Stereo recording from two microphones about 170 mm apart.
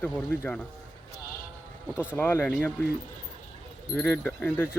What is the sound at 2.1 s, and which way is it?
Speech, 10° left (ahead or behind).